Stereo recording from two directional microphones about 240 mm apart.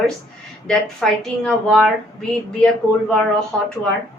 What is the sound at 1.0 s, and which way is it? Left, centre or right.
Speech, centre.